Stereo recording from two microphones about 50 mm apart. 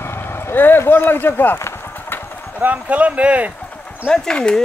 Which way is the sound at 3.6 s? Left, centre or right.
Left.